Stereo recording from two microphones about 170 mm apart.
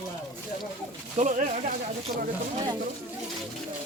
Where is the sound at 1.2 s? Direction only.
45° right (ahead or behind).